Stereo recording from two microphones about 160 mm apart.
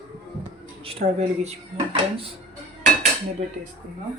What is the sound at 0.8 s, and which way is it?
Speech, 40° right (ahead or behind).